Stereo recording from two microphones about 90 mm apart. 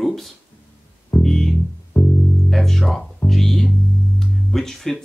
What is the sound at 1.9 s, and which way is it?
Music, 15° left (ahead or behind).